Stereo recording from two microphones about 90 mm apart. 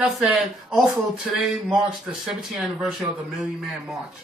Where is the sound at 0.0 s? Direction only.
10° right (ahead or behind).